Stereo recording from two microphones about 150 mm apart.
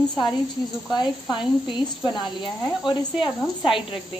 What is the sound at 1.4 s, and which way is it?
Speech, 30° left (ahead or behind).